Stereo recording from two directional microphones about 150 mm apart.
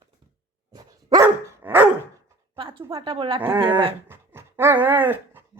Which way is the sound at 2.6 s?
35° right (ahead or behind).